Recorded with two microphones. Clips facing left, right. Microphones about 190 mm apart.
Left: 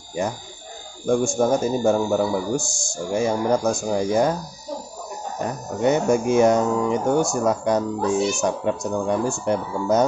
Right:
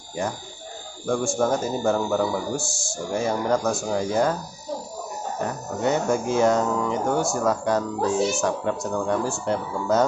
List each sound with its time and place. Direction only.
1.0 s speech: 15° left (ahead or behind)
5.8 s speech: 15° left (ahead or behind)